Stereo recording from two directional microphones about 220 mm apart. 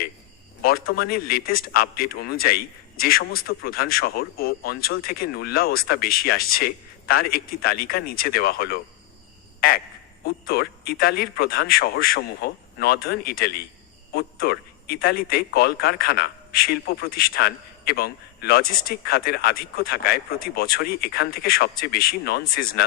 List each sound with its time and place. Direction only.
0.6 s a man's voice: 45° left (ahead or behind)
9.6 s frog: 40° left (ahead or behind)
10.2 s a man's voice: 45° left (ahead or behind)